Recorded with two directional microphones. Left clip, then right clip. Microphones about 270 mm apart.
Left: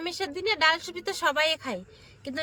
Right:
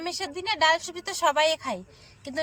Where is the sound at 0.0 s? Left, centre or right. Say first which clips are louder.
Left 1 dB; centre.